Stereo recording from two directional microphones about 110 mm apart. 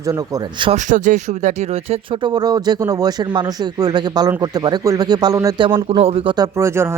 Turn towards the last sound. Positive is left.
turn(degrees=-25)  # may be behind; listen again after turning